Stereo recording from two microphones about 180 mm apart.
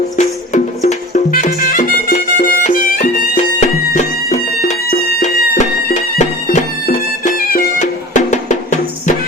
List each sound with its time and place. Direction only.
0.2 s music: 40° left (ahead or behind)